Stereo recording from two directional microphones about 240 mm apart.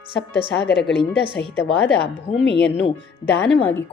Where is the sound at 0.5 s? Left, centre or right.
Left.